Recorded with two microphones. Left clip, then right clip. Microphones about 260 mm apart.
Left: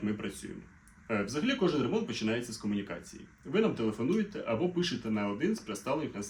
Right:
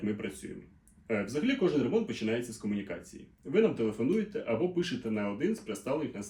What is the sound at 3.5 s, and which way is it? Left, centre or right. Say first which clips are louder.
Speech: right 3 dB; centre.